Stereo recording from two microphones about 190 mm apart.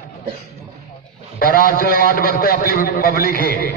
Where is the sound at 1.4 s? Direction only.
50° left (ahead or behind).